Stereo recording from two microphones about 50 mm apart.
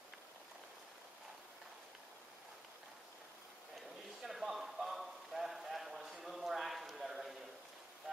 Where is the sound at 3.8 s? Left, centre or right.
Centre.